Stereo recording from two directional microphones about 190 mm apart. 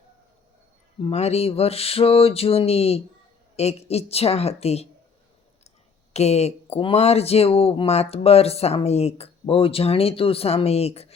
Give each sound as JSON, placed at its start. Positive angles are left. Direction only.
{"t": 1.0, "sound": "speech", "side_deg": 35}
{"t": 6.1, "sound": "speech", "side_deg": 35}